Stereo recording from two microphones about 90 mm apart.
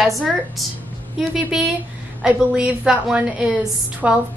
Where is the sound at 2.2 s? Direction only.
10° right (ahead or behind).